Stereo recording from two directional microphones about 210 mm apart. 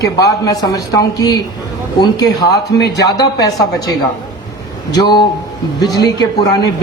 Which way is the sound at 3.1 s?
20° left (ahead or behind).